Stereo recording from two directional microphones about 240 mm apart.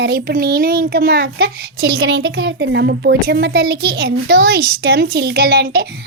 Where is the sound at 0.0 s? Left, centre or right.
Right.